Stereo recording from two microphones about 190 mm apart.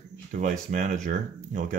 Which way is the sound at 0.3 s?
40° right (ahead or behind).